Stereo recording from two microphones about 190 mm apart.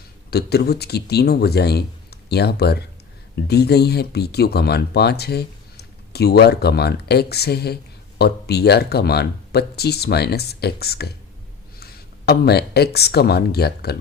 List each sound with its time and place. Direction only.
0.3 s speech: 55° left (ahead or behind)